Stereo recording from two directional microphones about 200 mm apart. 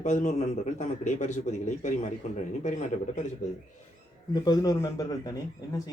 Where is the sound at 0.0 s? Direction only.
35° left (ahead or behind).